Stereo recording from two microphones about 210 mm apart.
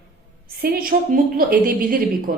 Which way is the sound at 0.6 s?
45° right (ahead or behind).